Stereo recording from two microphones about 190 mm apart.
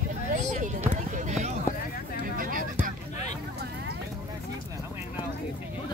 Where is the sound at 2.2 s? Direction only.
45° right (ahead or behind).